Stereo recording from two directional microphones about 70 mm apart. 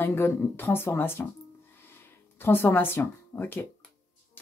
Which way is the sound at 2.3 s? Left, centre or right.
Left.